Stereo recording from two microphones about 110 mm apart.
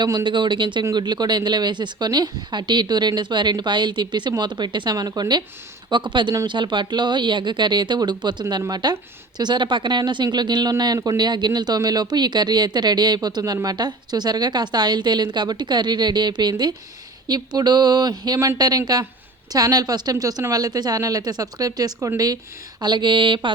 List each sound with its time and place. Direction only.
0.0 s speech: 40° right (ahead or behind)